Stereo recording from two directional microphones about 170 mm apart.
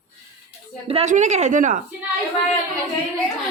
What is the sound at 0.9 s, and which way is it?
Speech, 40° right (ahead or behind).